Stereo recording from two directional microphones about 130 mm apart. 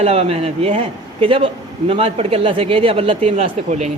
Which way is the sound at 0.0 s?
50° right (ahead or behind).